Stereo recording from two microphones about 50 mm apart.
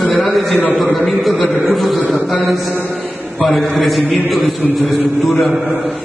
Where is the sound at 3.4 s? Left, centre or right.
Centre.